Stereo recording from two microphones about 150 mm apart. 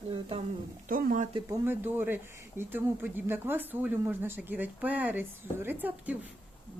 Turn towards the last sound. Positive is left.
turn(degrees=-10)  # may be behind; listen again after turning